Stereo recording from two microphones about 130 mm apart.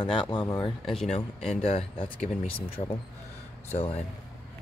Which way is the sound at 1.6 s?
50° left (ahead or behind).